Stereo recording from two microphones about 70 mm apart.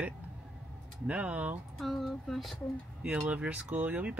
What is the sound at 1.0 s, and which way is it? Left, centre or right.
Speech, centre.